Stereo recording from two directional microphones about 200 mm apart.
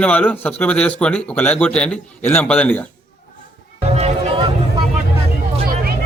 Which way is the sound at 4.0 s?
30° right (ahead or behind).